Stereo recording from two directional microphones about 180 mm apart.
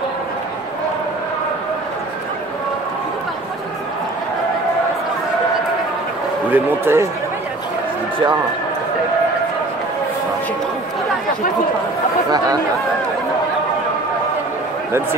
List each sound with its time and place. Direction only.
6.5 s speech: 10° right (ahead or behind)